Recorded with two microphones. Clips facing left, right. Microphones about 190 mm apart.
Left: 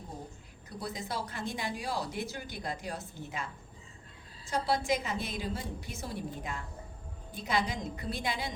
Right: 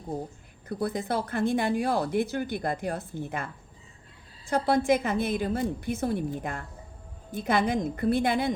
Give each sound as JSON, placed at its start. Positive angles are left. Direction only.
{"t": 0.7, "sound": "speech", "side_deg": -55}